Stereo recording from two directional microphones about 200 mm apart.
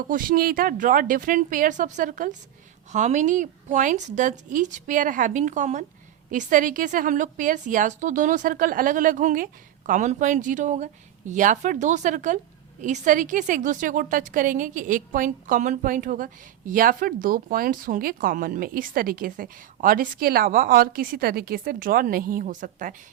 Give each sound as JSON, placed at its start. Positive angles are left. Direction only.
{"t": 0.1, "sound": "a woman's voice", "side_deg": -45}